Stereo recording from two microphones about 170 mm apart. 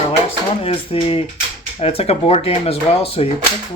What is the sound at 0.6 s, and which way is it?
Speech, 35° left (ahead or behind).